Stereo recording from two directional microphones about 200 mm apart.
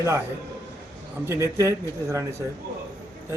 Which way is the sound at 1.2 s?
15° right (ahead or behind).